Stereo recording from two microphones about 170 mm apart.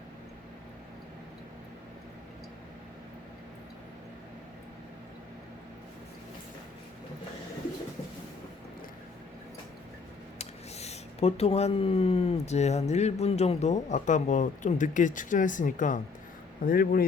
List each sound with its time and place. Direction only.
10.3 s speech: 40° left (ahead or behind); by 17.0 s 60° left (ahead or behind)